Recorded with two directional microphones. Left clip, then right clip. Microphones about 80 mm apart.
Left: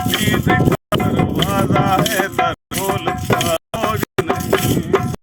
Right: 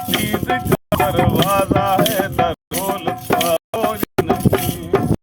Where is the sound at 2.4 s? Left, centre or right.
Right.